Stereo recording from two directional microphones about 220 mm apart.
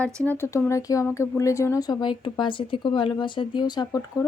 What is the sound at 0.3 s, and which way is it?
Speech, 10° left (ahead or behind).